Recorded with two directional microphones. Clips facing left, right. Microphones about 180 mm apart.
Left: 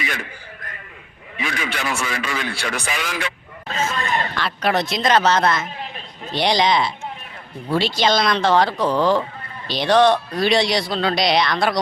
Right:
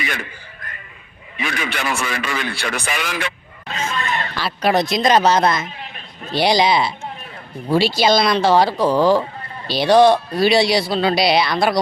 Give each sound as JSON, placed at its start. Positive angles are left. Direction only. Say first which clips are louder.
{"t": 1.4, "sound": "a man's voice", "louder": "right 1 dB", "side_deg": -65}
{"t": 3.7, "sound": "a sound", "louder": "left 1 dB", "side_deg": 40}
{"t": 4.4, "sound": "speech", "louder": "right 5 dB", "side_deg": -10}